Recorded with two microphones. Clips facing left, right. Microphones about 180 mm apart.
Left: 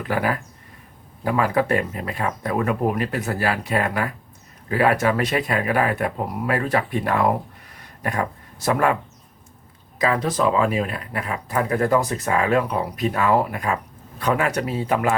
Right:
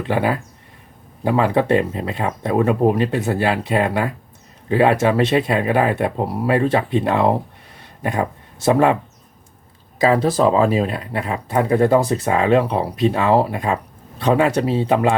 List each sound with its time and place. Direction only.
0.0 s speech: 25° right (ahead or behind)
7.8 s a sound: 25° right (ahead or behind)
10.0 s speech: 30° right (ahead or behind)